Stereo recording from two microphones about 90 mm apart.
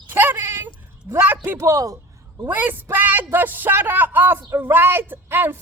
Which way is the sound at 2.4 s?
20° right (ahead or behind).